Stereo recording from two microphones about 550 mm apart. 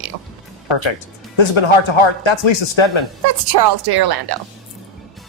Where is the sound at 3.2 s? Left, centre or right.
Right.